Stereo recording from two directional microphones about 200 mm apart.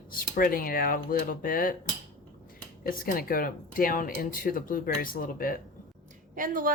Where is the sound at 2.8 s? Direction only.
45° left (ahead or behind).